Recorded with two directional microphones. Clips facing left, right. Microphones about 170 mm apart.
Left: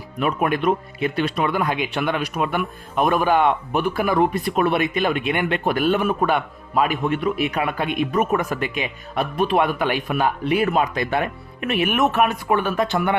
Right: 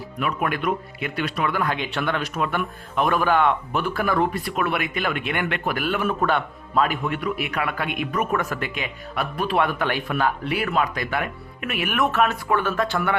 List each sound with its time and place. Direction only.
0.2 s speech: 30° left (ahead or behind)